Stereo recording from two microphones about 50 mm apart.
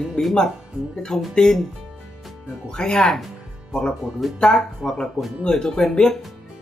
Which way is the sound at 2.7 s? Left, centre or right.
Centre.